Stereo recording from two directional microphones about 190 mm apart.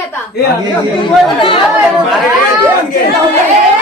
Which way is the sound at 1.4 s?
25° left (ahead or behind).